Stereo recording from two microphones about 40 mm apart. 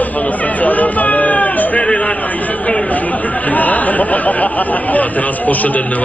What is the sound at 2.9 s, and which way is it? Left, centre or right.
Speech, left.